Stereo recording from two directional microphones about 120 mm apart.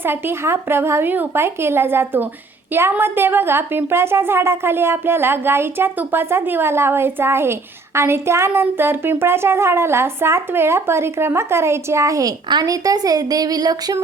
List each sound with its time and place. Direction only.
0.0 s speech: 20° right (ahead or behind)